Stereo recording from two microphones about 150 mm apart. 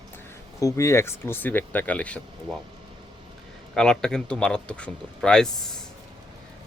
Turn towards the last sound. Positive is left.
turn(degrees=5)  # may be behind; listen again after turning